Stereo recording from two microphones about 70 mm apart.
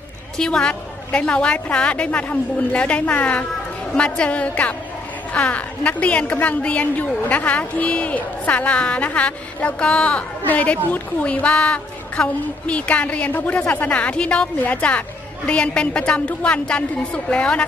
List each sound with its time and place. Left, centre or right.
0.4 s a woman's voice: centre